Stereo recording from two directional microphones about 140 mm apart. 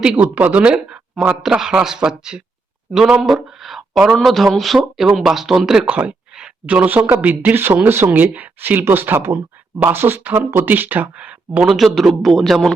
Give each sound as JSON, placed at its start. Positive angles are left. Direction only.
{"t": 0.0, "sound": "speech", "side_deg": -10}